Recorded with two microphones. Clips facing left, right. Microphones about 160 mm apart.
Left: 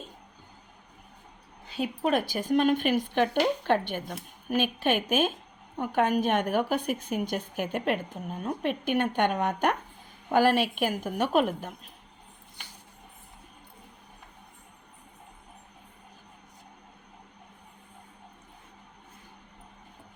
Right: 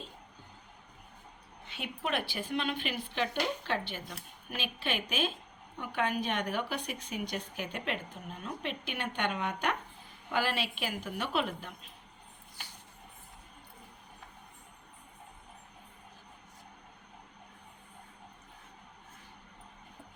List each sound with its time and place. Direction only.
1.6 s a woman's voice: 35° left (ahead or behind)